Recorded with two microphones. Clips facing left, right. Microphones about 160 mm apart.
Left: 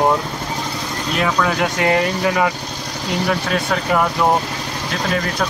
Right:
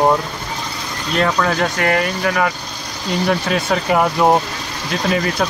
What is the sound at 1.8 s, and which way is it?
Speech, 20° left (ahead or behind).